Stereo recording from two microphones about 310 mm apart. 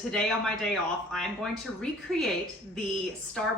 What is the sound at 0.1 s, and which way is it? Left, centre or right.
Speech, centre.